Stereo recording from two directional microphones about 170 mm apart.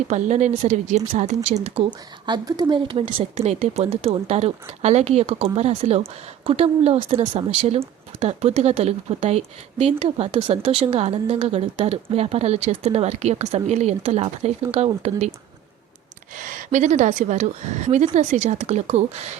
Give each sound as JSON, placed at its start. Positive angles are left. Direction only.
{"t": 0.1, "sound": "a woman's voice", "side_deg": -45}
{"t": 2.2, "sound": "a woman's voice", "side_deg": -25}
{"t": 16.7, "sound": "a woman's voice", "side_deg": -45}